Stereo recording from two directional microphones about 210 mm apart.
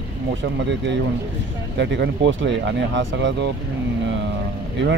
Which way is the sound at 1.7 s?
55° right (ahead or behind).